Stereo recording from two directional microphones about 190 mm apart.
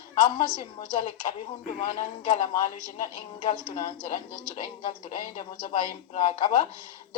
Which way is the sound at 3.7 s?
25° left (ahead or behind).